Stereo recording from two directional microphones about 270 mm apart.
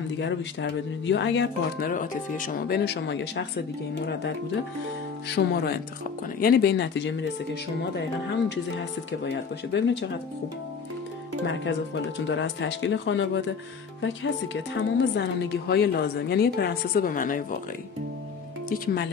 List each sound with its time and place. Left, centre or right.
0.2 s speech: left
5.3 s speech: left
12.3 s speech: left